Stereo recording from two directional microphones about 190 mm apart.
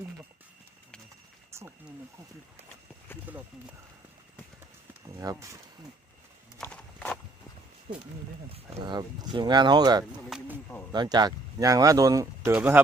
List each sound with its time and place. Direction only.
1.5 s a sound: 15° right (ahead or behind)
3.3 s speech: 10° right (ahead or behind)
5.0 s speech: 15° right (ahead or behind)
6.6 s horse: 5° left (ahead or behind)
8.5 s speech: 25° right (ahead or behind)
10.2 s speech: 5° right (ahead or behind)
10.9 s speech: 20° right (ahead or behind)